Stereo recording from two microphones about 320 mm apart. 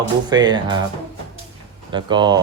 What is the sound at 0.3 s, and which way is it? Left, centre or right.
Speech, centre.